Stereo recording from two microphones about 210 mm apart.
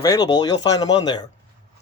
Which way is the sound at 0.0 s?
15° left (ahead or behind).